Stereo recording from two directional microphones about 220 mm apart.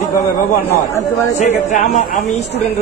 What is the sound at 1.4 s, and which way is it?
Speech, 35° left (ahead or behind).